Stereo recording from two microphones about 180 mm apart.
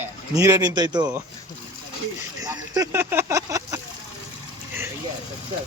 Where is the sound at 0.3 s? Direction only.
20° right (ahead or behind).